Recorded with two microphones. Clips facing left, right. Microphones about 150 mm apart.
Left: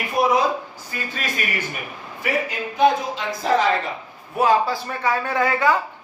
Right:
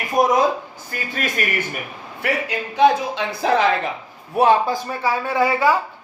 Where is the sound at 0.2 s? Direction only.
45° right (ahead or behind).